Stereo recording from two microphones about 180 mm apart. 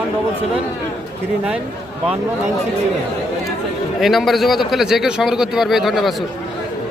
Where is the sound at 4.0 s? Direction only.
Centre (ahead or behind).